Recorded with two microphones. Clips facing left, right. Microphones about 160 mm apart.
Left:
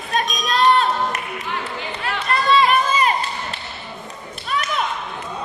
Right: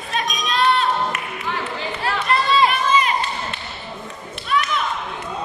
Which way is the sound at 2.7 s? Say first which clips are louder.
Left 1 dB; 45° left (ahead or behind).